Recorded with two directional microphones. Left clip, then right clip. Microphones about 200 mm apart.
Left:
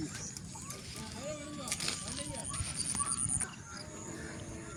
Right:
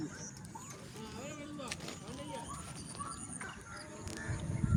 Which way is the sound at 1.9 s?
15° left (ahead or behind).